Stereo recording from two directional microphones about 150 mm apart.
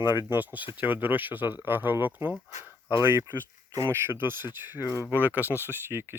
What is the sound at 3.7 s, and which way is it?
Speech, 20° right (ahead or behind).